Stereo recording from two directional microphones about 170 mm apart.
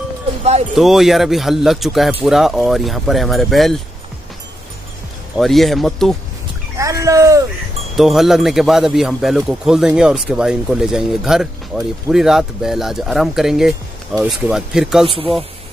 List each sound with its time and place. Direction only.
0.4 s speech: 40° right (ahead or behind)
0.7 s a man's voice: centre (ahead or behind)
5.4 s a man's voice: centre (ahead or behind)
6.8 s speech: 20° right (ahead or behind)
7.9 s a man's voice: centre (ahead or behind)